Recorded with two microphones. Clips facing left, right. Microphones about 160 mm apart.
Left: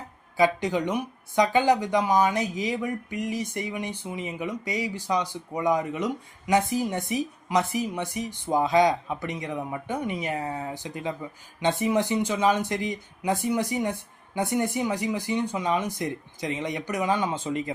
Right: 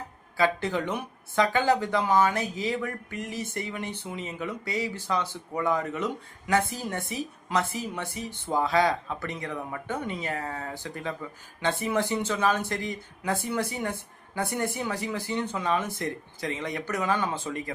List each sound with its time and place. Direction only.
0.3 s a woman's voice: 15° left (ahead or behind)